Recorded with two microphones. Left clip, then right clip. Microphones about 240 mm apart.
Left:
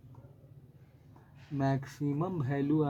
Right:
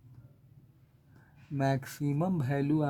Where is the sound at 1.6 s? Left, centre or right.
Right.